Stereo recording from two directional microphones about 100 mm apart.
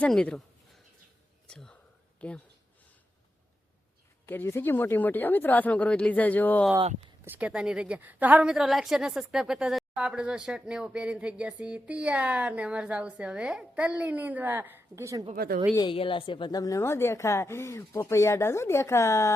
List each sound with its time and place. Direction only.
0.1 s speech: 5° left (ahead or behind)
1.5 s a sound: 5° left (ahead or behind)
2.2 s speech: 10° left (ahead or behind)
4.3 s speech: 25° left (ahead or behind)
7.3 s a woman's voice: 15° right (ahead or behind); by 15.3 s 35° right (ahead or behind)
15.9 s a woman's voice: 60° left (ahead or behind); by 16.8 s 40° left (ahead or behind)
16.8 s speech: 25° left (ahead or behind)